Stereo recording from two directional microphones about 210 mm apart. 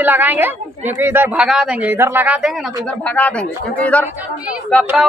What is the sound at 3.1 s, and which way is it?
Speech, 5° left (ahead or behind).